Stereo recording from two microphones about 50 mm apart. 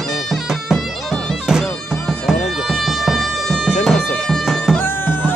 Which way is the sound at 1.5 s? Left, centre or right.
Centre.